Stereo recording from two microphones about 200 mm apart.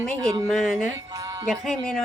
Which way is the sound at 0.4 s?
Centre (ahead or behind).